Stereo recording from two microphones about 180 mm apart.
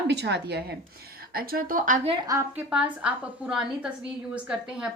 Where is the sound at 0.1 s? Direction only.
70° right (ahead or behind).